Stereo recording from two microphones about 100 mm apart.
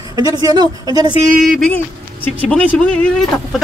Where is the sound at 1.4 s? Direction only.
10° left (ahead or behind).